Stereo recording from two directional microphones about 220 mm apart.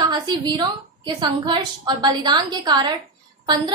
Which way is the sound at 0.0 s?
20° right (ahead or behind).